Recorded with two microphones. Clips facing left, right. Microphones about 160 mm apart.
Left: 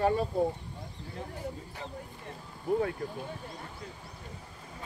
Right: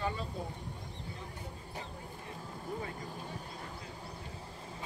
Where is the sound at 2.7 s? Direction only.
55° left (ahead or behind).